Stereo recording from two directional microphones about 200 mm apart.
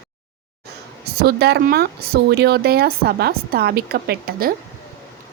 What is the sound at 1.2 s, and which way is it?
Speech, 50° right (ahead or behind).